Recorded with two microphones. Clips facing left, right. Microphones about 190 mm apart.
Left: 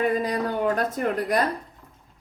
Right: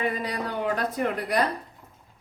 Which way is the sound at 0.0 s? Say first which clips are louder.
Left 5 dB; 45° left (ahead or behind).